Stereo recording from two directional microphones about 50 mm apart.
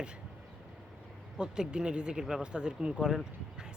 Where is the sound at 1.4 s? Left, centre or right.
Centre.